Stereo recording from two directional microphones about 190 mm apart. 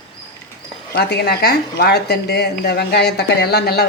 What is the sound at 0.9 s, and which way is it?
Speech, 60° left (ahead or behind).